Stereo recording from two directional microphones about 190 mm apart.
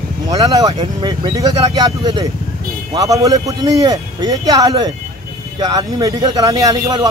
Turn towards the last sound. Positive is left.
turn(degrees=-20)  # may be behind; listen again after turning